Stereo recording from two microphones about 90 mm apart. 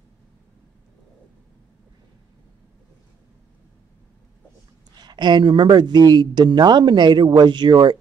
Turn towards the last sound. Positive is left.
turn(degrees=-55)  # may be behind; listen again after turning